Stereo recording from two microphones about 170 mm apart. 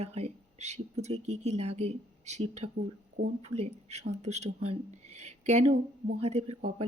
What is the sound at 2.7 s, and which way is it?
Speech, 65° right (ahead or behind).